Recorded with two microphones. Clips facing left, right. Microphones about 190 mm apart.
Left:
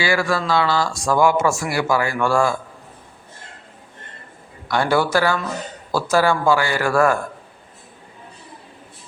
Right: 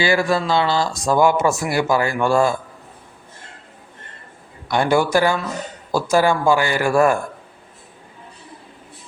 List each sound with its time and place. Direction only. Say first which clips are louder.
0.0 s speech: right 2 dB; 20° right (ahead or behind)
4.7 s speech: right 2 dB; 15° right (ahead or behind)